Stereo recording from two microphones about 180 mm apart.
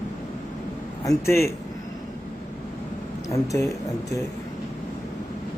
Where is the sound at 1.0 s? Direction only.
15° left (ahead or behind).